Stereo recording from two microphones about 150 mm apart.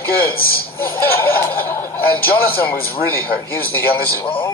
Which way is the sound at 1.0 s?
15° left (ahead or behind).